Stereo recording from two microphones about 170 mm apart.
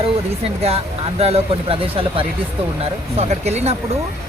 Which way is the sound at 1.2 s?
35° right (ahead or behind).